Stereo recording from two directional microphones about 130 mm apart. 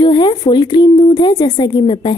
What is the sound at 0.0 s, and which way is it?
A woman's voice, 35° left (ahead or behind).